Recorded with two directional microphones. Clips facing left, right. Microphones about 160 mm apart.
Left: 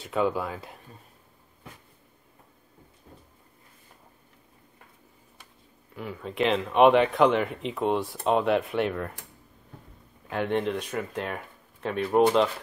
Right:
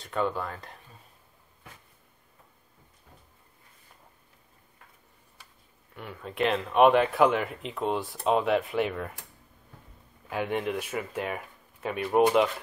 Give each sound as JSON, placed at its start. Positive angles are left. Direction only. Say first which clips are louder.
{"t": 0.0, "sound": "speech", "louder": "left 3 dB", "side_deg": 5}
{"t": 5.9, "sound": "speech", "louder": "left 2 dB", "side_deg": 0}
{"t": 10.3, "sound": "speech", "louder": "left 2 dB", "side_deg": -5}